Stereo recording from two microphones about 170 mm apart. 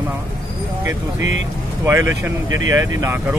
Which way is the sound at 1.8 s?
15° right (ahead or behind).